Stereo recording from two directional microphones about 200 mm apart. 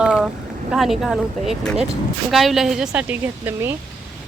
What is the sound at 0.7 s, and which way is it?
Speech, centre (ahead or behind).